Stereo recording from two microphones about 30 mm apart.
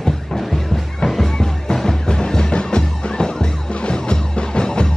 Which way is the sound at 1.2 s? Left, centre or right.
Centre.